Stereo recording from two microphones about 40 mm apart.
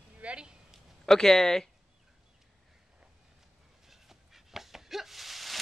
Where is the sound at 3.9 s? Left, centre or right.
Centre.